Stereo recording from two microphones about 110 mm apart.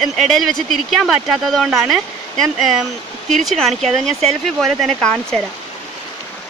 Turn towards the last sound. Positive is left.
turn(degrees=10)  # may be behind; listen again after turning